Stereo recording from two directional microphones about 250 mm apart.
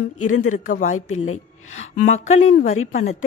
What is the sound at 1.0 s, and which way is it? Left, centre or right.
Speech, left.